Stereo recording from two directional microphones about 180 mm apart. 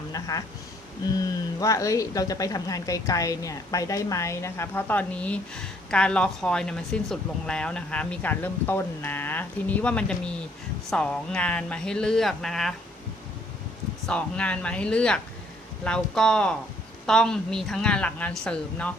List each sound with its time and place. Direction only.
0.1 s a sound: 20° left (ahead or behind)
1.1 s speech: 20° left (ahead or behind); by 12.7 s centre (ahead or behind)
14.1 s speech: 5° left (ahead or behind)